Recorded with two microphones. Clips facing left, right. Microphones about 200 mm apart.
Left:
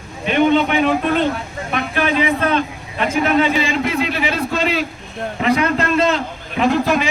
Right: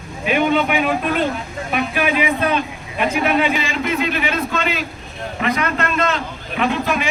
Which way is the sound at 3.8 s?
30° left (ahead or behind).